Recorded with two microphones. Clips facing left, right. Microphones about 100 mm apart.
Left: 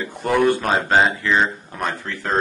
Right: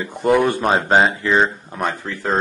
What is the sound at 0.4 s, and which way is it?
Speech, 20° right (ahead or behind).